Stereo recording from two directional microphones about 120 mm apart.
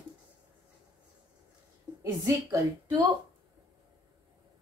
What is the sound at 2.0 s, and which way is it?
Speech, 25° right (ahead or behind).